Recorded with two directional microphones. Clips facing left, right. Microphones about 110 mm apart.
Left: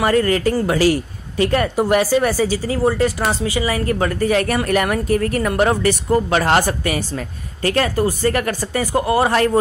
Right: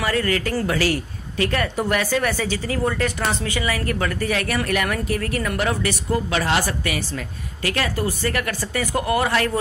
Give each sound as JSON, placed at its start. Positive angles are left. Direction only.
{"t": 0.0, "sound": "a woman's voice", "side_deg": 40}